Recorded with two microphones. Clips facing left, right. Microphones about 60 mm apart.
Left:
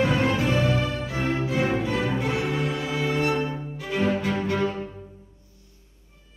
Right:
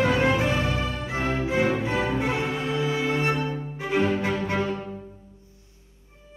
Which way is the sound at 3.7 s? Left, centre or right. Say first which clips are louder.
Right 4 dB; right.